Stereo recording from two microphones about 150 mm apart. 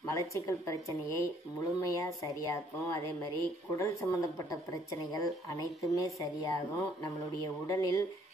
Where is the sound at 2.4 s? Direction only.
20° left (ahead or behind).